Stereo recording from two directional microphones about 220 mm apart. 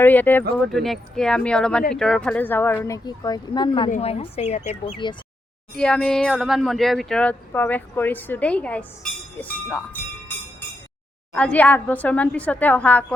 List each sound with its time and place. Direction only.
0.0 s speech: 10° left (ahead or behind)
3.8 s speech: 30° left (ahead or behind)
5.7 s speech: 5° left (ahead or behind)
11.3 s speech: 5° left (ahead or behind)